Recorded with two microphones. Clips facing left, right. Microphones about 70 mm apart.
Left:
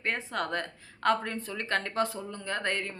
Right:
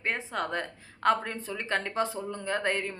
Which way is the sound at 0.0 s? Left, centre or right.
Centre.